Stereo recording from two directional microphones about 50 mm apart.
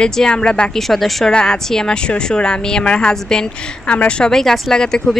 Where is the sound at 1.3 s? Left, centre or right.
Centre.